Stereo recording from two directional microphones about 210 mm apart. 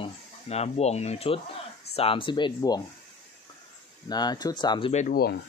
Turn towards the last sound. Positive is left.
turn(degrees=45)  # may be behind; listen again after turning